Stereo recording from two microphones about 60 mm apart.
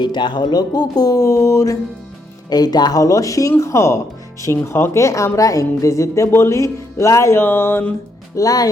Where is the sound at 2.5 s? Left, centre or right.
Left.